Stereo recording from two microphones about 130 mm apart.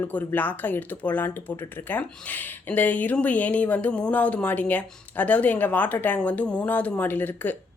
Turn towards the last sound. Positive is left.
turn(degrees=15)  # may be behind; listen again after turning